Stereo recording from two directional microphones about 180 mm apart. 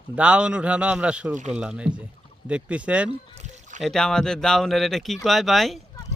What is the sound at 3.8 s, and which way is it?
Speech, centre (ahead or behind).